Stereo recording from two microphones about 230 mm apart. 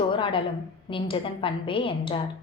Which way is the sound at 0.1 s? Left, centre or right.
Left.